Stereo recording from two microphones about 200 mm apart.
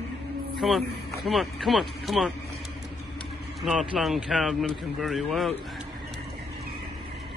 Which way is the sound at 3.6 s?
5° right (ahead or behind).